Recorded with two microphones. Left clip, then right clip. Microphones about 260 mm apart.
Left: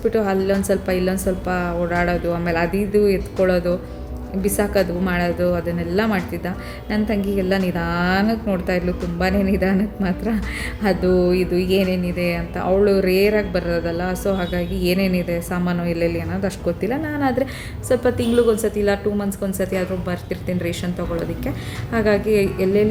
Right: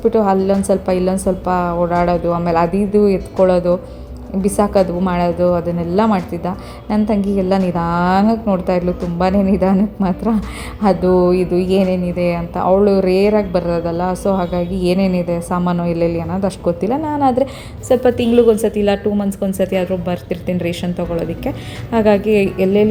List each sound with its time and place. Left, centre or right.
0.1 s a woman's voice: centre